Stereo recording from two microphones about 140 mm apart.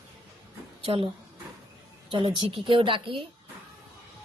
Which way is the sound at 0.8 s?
40° right (ahead or behind).